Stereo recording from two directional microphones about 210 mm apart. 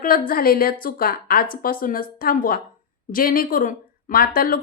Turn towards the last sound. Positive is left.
turn(degrees=45)  # may be behind; listen again after turning